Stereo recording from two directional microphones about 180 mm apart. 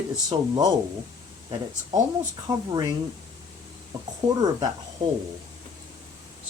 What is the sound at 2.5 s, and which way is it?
Speech, 20° right (ahead or behind).